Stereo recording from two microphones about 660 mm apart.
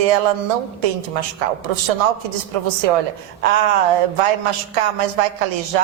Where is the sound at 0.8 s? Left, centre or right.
Right.